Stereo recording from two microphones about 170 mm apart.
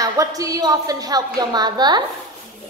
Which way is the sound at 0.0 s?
20° right (ahead or behind).